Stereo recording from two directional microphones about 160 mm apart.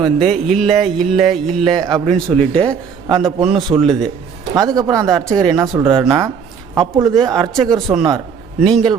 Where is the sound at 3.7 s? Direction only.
30° right (ahead or behind).